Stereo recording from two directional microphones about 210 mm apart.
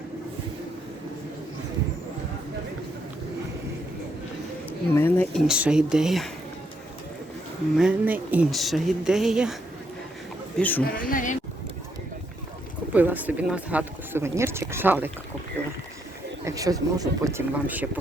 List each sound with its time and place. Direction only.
4.9 s speech: 10° left (ahead or behind)
7.8 s speech: 5° right (ahead or behind)
10.6 s a woman's voice: 10° left (ahead or behind)
10.9 s a woman's voice: 40° left (ahead or behind)
12.9 s speech: 10° right (ahead or behind)
16.4 s speech: 15° right (ahead or behind)